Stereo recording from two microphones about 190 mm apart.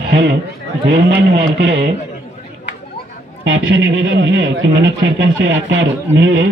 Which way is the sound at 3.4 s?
90° right.